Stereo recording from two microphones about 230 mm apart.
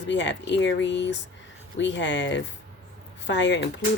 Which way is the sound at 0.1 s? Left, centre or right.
Left.